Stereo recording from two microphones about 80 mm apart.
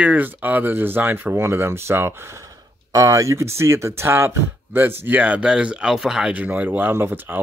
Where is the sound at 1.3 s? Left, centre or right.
Right.